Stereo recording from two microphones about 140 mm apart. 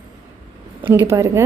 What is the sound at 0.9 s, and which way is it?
Speech, 20° right (ahead or behind).